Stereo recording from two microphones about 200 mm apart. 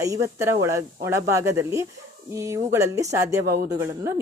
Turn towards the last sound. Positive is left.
turn(degrees=-15)  # may be behind; listen again after turning